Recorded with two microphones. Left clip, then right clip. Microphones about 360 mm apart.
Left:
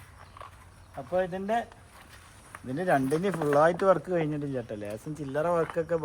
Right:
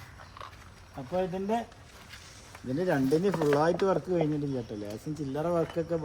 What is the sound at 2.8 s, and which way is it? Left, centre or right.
Speech, left.